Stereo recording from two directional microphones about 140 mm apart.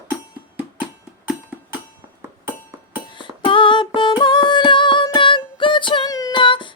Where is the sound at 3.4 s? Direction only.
35° left (ahead or behind).